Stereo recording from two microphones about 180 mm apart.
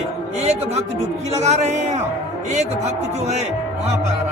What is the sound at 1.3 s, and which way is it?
Speech, 40° right (ahead or behind).